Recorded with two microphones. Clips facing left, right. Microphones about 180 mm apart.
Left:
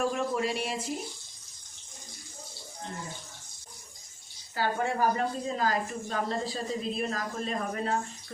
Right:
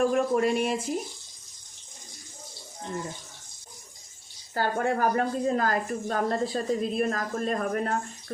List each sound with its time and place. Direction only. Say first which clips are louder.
0.0 s a woman's voice: right 6 dB; 50° right (ahead or behind)
4.5 s a woman's voice: right 3 dB; 55° right (ahead or behind)